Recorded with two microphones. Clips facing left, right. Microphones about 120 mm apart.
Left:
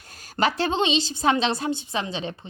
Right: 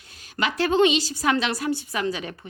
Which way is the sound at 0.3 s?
30° left (ahead or behind).